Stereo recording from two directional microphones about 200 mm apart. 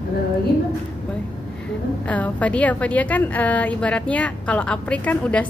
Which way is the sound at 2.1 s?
5° left (ahead or behind).